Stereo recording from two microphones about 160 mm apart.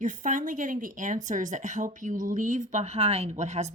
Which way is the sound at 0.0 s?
55° right (ahead or behind).